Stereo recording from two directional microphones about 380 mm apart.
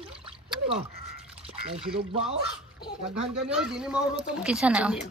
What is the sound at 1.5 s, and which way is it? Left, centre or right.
Speech, centre.